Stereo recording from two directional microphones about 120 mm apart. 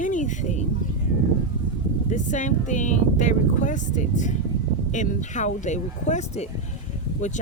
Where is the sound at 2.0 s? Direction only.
90° left; by 6.5 s 70° left (ahead or behind).